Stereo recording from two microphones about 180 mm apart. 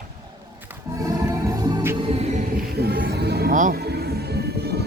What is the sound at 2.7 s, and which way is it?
Music, 60° right (ahead or behind).